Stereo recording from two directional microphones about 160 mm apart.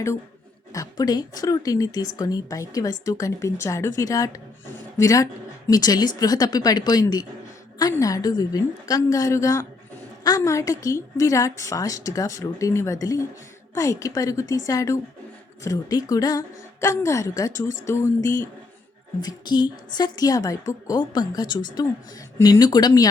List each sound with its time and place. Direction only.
0.7 s speech: 20° left (ahead or behind)
17.8 s a sound: 15° left (ahead or behind)
19.2 s speech: 25° left (ahead or behind)